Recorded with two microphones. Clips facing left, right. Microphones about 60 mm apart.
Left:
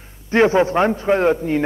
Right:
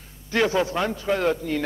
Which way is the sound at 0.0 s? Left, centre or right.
Left.